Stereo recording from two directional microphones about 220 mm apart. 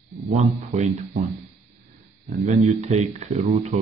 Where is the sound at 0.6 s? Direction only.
30° right (ahead or behind).